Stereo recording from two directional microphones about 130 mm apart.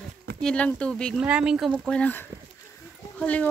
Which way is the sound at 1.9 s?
10° left (ahead or behind).